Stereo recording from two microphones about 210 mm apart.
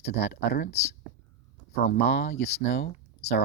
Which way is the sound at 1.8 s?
50° left (ahead or behind).